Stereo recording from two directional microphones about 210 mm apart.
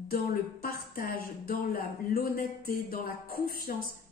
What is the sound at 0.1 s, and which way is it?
Speech, 45° left (ahead or behind).